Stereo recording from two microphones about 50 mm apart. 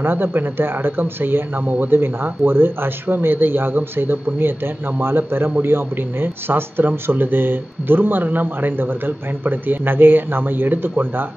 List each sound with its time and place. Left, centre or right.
0.0 s speech: right